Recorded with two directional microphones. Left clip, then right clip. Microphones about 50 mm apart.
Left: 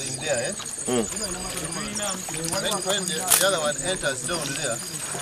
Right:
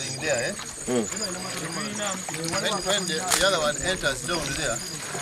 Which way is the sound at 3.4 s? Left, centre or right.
Right.